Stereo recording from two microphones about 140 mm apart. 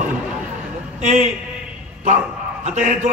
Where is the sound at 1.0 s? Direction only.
65° right (ahead or behind).